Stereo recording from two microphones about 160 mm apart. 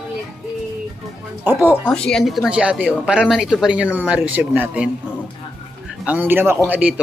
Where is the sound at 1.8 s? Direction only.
5° left (ahead or behind); by 4.9 s 10° right (ahead or behind).